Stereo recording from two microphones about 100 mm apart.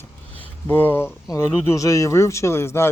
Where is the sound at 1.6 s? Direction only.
35° left (ahead or behind).